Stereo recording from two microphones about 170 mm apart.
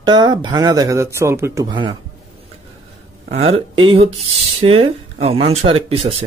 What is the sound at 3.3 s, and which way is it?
Speech, 35° right (ahead or behind).